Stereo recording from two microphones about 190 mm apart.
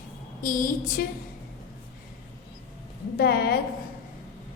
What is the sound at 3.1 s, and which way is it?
Speech, 55° left (ahead or behind).